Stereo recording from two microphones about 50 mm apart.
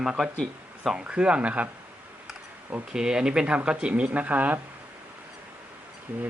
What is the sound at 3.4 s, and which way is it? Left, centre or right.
Speech, right.